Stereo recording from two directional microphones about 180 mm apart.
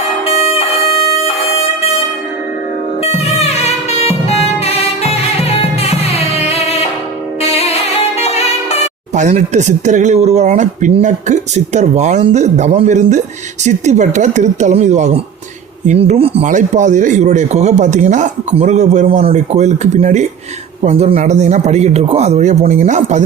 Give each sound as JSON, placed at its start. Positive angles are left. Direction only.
{"t": 0.3, "sound": "music", "side_deg": 35}
{"t": 3.0, "sound": "music", "side_deg": 35}
{"t": 9.1, "sound": "speech", "side_deg": -45}